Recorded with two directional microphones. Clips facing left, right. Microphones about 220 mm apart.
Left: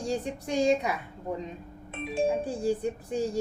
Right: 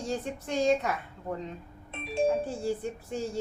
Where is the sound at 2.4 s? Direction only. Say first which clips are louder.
Left 3 dB; 15° left (ahead or behind).